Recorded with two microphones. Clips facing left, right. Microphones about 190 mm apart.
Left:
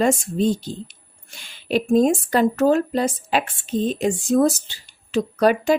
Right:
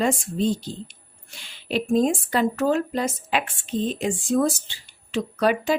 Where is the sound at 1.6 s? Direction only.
45° left (ahead or behind).